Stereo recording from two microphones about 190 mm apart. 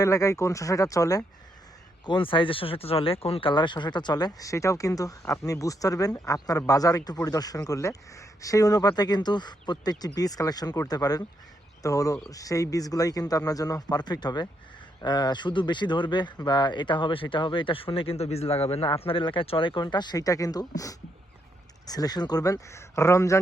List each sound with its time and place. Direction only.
0.0 s speech: 15° left (ahead or behind)